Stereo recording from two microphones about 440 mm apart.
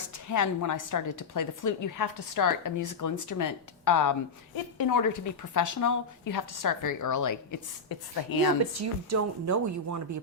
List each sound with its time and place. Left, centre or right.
0.1 s a woman's voice: left
8.8 s speech: right